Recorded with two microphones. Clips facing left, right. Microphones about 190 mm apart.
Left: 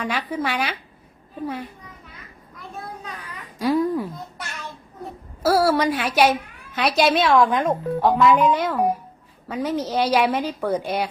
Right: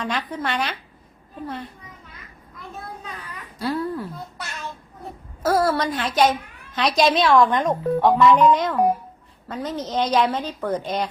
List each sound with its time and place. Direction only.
0.0 s a woman's voice: 10° left (ahead or behind)
3.2 s babbling: 15° left (ahead or behind)
5.4 s a woman's voice: 10° left (ahead or behind)